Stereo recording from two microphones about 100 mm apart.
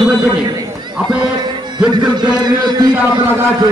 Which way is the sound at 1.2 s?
50° right (ahead or behind).